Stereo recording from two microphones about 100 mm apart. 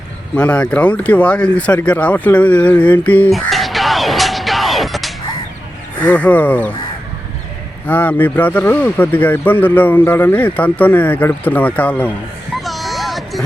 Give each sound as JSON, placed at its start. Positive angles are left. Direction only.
{"t": 0.3, "sound": "speech", "side_deg": 10}
{"t": 3.3, "sound": "music", "side_deg": 0}
{"t": 6.1, "sound": "speech", "side_deg": 15}
{"t": 7.9, "sound": "speech", "side_deg": 15}
{"t": 12.6, "sound": "a sound", "side_deg": 0}